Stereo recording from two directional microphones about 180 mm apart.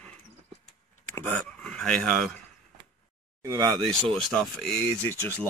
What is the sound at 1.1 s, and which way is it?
Speech, 10° left (ahead or behind).